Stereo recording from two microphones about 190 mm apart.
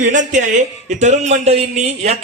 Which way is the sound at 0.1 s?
40° right (ahead or behind).